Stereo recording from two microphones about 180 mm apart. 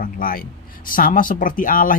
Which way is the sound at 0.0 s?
50° left (ahead or behind).